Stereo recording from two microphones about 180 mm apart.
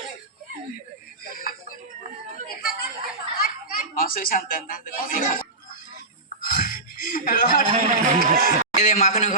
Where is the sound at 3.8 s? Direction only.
50° left (ahead or behind).